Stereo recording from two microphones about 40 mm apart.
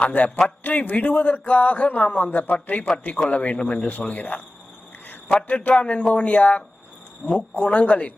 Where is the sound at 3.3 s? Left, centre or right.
Left.